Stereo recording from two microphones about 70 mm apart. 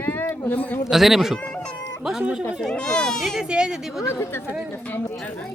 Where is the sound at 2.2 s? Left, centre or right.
Centre.